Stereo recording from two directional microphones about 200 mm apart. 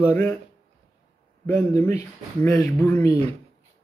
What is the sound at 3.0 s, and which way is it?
Speech, 30° right (ahead or behind).